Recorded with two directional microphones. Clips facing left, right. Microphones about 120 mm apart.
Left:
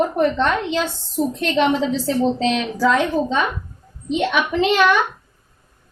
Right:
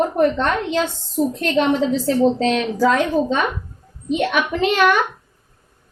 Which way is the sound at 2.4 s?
45° right (ahead or behind).